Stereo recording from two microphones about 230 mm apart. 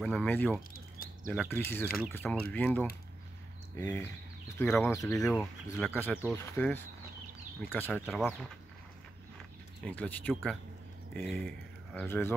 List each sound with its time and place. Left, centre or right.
0.0 s speech: centre
9.8 s speech: centre